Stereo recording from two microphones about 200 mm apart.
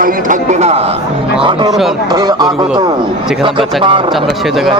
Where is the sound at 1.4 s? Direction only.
20° right (ahead or behind).